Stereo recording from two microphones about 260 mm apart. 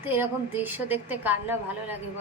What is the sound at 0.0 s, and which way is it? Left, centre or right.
A woman's voice, centre.